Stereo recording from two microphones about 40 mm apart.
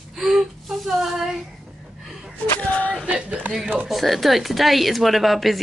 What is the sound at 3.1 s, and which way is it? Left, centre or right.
Speech, right.